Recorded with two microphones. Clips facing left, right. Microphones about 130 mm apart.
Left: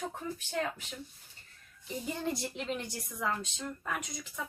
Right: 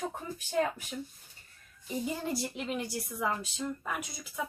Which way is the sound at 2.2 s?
5° right (ahead or behind).